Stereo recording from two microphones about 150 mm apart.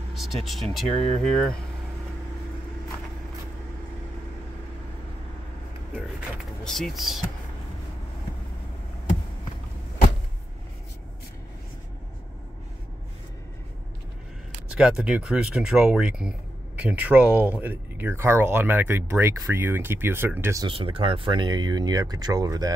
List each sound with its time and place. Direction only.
0.1 s a sound: centre (ahead or behind)
0.5 s speech: centre (ahead or behind)
6.6 s speech: 5° left (ahead or behind)
14.7 s speech: 5° right (ahead or behind)
20.6 s speech: 35° right (ahead or behind)